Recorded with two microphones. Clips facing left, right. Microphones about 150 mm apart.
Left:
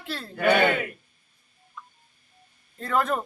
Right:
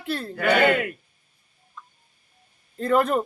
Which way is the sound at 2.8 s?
20° right (ahead or behind).